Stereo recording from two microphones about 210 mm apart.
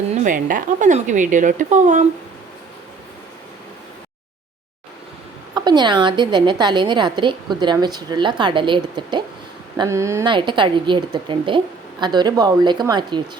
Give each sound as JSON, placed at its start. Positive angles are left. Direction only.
{"t": 0.1, "sound": "a woman's voice", "side_deg": -40}
{"t": 5.5, "sound": "a woman's voice", "side_deg": -20}